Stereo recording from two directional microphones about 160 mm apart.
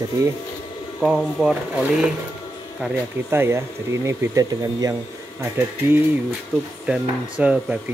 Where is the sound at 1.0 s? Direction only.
Centre (ahead or behind).